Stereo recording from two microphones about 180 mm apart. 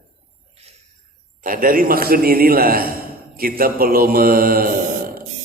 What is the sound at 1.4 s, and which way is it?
A man's voice, 50° right (ahead or behind).